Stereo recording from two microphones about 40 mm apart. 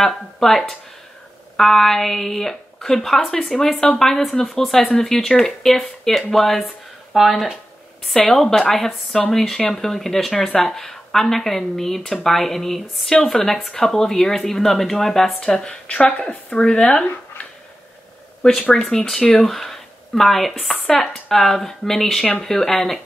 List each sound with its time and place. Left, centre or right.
0.0 s speech: centre
13.1 s speech: centre
13.5 s speech: centre
15.6 s a woman's voice: left
16.4 s speech: centre
18.4 s speech: centre